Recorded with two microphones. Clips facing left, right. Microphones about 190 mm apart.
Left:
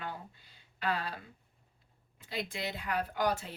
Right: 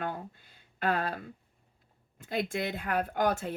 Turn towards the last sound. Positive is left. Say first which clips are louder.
# right 4 dB
turn(degrees=-50)  # may be behind; listen again after turning